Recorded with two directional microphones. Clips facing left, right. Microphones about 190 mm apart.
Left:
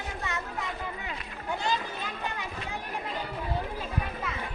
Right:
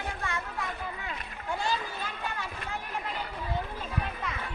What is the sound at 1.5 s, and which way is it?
Children playing, 20° left (ahead or behind).